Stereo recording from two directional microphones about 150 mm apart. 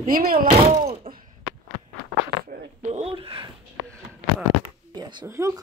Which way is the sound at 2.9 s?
40° right (ahead or behind).